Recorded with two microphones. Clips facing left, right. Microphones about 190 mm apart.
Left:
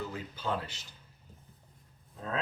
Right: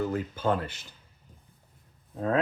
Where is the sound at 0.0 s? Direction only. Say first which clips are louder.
Right 9 dB; 50° right (ahead or behind).